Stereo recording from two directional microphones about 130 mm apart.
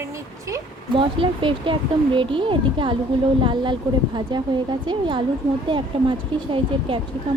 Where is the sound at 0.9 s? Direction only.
40° right (ahead or behind).